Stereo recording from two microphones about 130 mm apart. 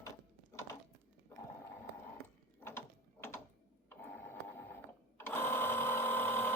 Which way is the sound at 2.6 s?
20° left (ahead or behind).